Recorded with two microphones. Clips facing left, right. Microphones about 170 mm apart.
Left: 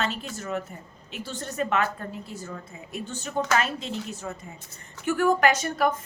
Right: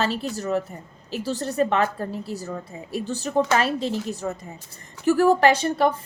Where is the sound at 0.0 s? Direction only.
35° right (ahead or behind).